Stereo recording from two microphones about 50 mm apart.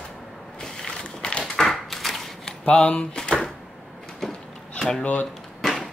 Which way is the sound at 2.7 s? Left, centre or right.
Centre.